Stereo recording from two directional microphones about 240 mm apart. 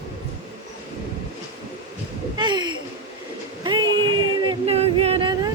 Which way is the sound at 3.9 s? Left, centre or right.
Right.